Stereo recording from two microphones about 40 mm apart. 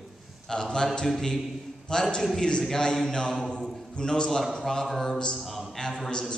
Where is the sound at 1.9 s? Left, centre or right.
Centre.